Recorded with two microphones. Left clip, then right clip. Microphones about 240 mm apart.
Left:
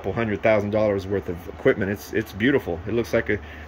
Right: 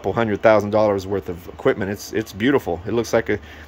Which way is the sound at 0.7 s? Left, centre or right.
Centre.